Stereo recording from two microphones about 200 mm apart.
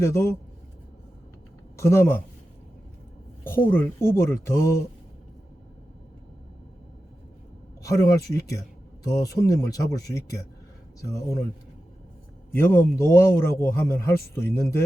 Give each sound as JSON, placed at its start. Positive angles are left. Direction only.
{"t": 0.0, "sound": "speech", "side_deg": 15}
{"t": 1.7, "sound": "speech", "side_deg": 15}
{"t": 3.4, "sound": "speech", "side_deg": 10}
{"t": 7.8, "sound": "speech", "side_deg": 15}
{"t": 12.5, "sound": "speech", "side_deg": 10}